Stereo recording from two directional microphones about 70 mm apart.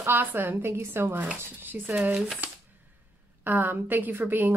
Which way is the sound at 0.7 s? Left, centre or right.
Right.